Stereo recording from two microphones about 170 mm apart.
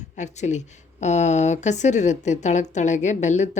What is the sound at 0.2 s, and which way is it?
A woman's voice, 45° left (ahead or behind).